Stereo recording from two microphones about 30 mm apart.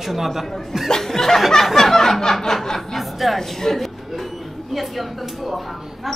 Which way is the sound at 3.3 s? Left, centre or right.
Centre.